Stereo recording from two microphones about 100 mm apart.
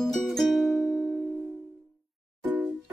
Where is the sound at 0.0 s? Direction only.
Centre (ahead or behind).